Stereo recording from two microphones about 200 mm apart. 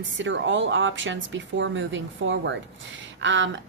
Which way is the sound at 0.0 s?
65° right (ahead or behind).